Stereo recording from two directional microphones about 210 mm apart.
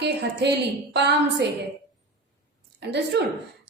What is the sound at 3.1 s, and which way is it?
Speech, 55° right (ahead or behind).